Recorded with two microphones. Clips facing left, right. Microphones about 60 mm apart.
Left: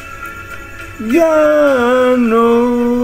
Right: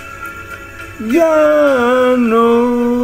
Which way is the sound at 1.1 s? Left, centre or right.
Centre.